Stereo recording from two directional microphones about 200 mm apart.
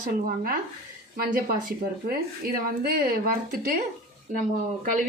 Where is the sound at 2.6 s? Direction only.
50° right (ahead or behind).